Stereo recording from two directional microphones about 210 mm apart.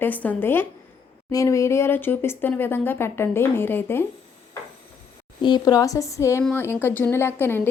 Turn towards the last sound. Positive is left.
turn(degrees=10)  # may be behind; listen again after turning